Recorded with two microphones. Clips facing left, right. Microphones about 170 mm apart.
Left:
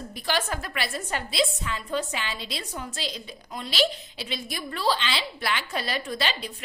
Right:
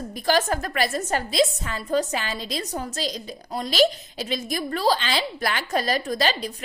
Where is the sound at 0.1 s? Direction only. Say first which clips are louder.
Right 7 dB; 45° right (ahead or behind).